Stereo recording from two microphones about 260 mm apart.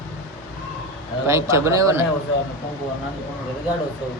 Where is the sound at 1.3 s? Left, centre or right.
Centre.